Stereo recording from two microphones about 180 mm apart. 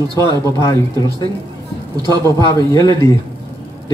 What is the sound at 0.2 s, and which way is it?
Speech, 15° left (ahead or behind).